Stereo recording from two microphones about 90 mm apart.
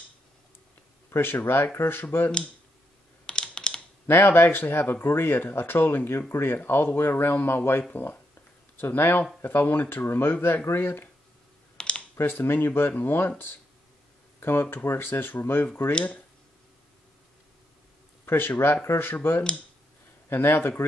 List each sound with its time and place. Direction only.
1.1 s speech: 25° left (ahead or behind)
3.3 s computer keyboard: 10° left (ahead or behind)
4.1 s speech: 25° left (ahead or behind)
11.7 s computer keyboard: 10° left (ahead or behind)
12.2 s speech: 25° left (ahead or behind)
14.4 s speech: 25° left (ahead or behind)
18.2 s speech: 25° left (ahead or behind)